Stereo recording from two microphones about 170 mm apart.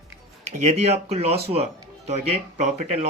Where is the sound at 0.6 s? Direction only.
40° right (ahead or behind).